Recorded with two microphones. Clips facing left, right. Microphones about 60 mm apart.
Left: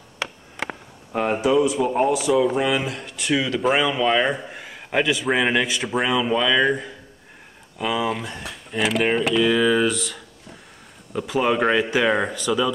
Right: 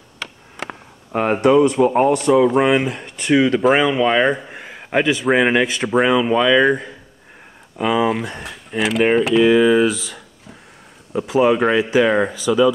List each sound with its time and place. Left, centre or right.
1.1 s speech: right
1.4 s speech: right
1.9 s speech: right
2.5 s speech: right
3.1 s speech: centre
6.0 s speech: centre
9.4 s speech: centre